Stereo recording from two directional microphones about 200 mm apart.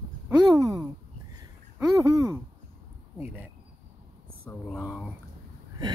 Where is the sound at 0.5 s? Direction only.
20° right (ahead or behind).